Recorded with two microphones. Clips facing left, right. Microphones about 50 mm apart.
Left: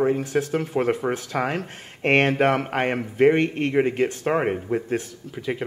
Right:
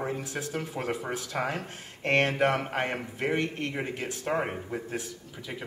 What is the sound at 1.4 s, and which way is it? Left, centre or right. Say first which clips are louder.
Speech: left 6 dB; left.